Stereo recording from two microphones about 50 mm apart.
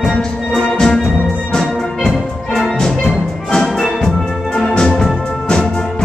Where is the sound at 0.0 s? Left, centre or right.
Centre.